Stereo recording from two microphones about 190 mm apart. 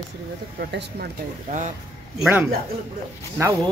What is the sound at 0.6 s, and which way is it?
Speech, 60° right (ahead or behind).